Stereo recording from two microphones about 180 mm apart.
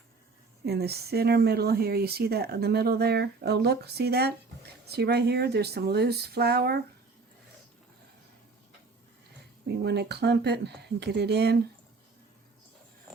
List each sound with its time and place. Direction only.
0.6 s speech: 65° right (ahead or behind)
9.6 s speech: 70° right (ahead or behind)